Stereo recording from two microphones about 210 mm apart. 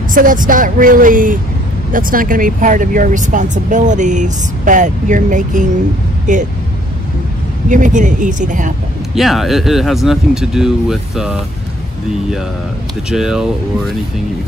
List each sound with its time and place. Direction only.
0.1 s speech: 40° right (ahead or behind)
7.7 s speech: 35° right (ahead or behind)
9.1 s speech: centre (ahead or behind)
13.1 s speech: centre (ahead or behind)